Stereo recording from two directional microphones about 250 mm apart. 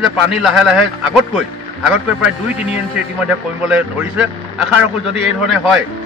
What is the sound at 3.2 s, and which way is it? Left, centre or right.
Speech, centre.